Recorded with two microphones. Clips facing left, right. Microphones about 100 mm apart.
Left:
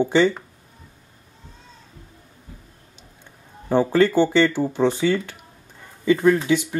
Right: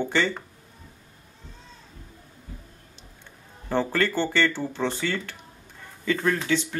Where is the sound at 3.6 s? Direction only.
15° left (ahead or behind).